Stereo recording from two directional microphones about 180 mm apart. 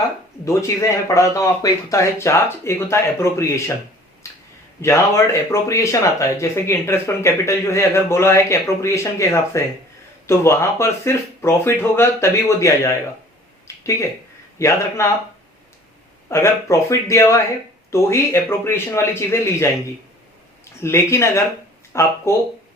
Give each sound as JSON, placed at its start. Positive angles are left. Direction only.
{"t": 0.4, "sound": "speech", "side_deg": 15}
{"t": 4.2, "sound": "a sound", "side_deg": 15}
{"t": 4.8, "sound": "speech", "side_deg": 15}
{"t": 14.6, "sound": "speech", "side_deg": 15}
{"t": 16.3, "sound": "speech", "side_deg": 15}
{"t": 20.8, "sound": "speech", "side_deg": 15}